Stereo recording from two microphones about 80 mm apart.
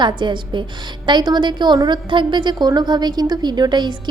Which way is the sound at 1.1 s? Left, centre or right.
Right.